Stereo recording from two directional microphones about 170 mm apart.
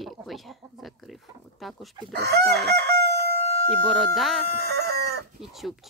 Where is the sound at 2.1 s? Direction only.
75° right (ahead or behind).